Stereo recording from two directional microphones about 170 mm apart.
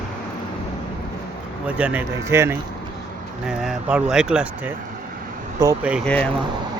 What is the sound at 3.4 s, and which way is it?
Speech, centre (ahead or behind).